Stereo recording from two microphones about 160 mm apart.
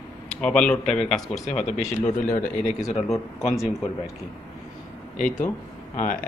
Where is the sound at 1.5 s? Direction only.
45° left (ahead or behind).